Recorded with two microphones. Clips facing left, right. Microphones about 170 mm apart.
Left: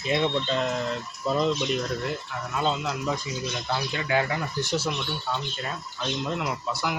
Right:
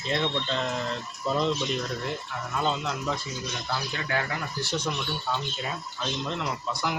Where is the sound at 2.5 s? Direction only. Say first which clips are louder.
Left 1 dB; 5° left (ahead or behind).